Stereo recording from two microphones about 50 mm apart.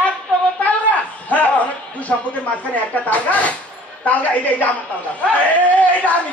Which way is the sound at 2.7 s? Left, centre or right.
Left.